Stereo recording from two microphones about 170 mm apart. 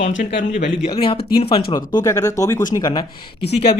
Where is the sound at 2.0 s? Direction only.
20° left (ahead or behind).